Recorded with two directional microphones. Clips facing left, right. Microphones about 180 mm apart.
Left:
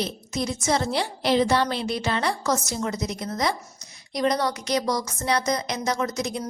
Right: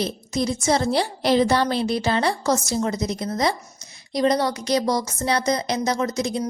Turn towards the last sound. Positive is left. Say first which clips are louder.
# right 3 dB
turn(degrees=-30)  # may be behind; listen again after turning